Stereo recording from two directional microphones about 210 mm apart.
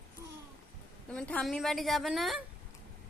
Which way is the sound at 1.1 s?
5° left (ahead or behind).